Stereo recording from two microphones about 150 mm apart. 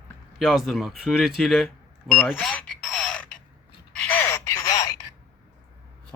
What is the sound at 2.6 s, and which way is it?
Creak, 5° left (ahead or behind).